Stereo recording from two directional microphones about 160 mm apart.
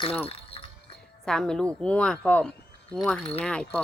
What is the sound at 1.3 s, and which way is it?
Speech, 5° left (ahead or behind).